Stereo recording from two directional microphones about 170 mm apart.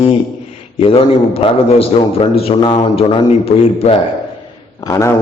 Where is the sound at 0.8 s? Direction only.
35° left (ahead or behind).